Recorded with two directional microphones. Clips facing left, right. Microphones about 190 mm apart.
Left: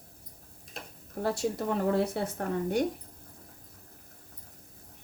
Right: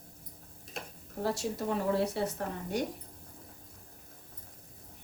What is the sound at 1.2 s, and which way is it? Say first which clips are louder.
A woman's voice: left 3 dB; 55° left (ahead or behind).